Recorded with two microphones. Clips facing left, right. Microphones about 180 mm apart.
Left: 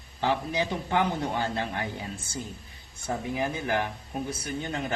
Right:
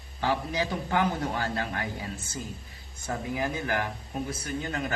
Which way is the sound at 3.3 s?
20° left (ahead or behind).